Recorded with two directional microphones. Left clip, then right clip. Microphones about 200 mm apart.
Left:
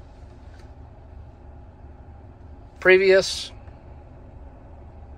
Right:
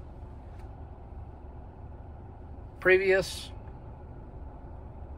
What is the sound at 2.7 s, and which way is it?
Speech, 20° left (ahead or behind).